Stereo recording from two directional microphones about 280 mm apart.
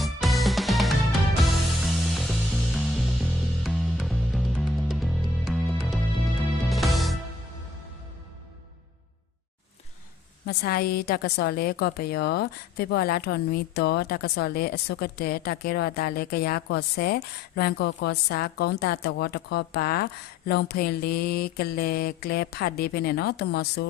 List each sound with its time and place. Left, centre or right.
0.0 s music: centre
10.4 s a woman's voice: left